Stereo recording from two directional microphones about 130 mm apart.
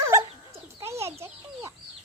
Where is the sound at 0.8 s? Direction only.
20° right (ahead or behind).